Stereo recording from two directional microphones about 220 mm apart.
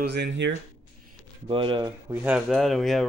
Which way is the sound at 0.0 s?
50° right (ahead or behind).